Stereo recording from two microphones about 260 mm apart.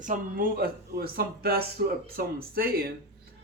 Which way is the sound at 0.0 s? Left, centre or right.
Right.